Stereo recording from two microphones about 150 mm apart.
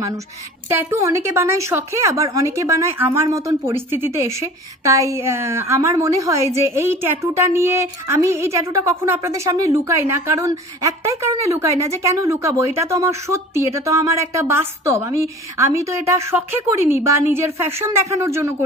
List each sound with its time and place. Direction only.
0.7 s a woman's voice: 15° right (ahead or behind)